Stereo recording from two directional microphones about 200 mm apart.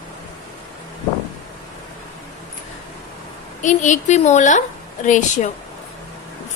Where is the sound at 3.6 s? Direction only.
35° left (ahead or behind).